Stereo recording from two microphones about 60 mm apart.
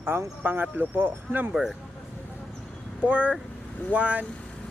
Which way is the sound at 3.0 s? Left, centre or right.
Right.